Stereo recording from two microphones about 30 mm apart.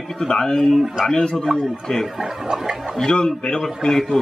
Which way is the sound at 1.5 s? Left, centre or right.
Centre.